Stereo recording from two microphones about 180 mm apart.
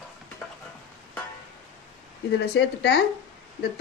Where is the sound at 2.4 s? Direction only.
70° left (ahead or behind).